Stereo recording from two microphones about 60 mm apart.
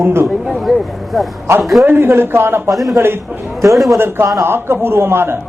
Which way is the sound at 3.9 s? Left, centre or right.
Right.